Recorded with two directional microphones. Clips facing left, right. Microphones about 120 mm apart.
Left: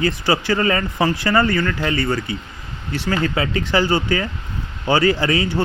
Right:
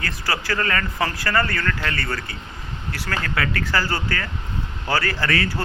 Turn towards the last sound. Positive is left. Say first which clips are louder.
# left 4 dB
turn(degrees=20)  # may be behind; listen again after turning